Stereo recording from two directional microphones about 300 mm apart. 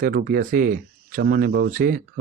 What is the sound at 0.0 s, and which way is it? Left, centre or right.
Speech, right.